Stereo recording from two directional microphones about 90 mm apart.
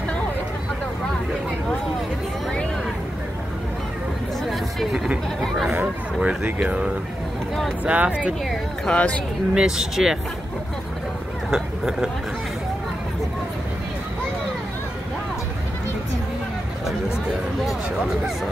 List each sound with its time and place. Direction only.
4.5 s a sound: 5° right (ahead or behind)
5.4 s chatter: centre (ahead or behind)
6.2 s speech: 15° right (ahead or behind)
8.5 s speech: 10° left (ahead or behind)
9.5 s speech: 5° right (ahead or behind)
11.5 s speech: 5° right (ahead or behind)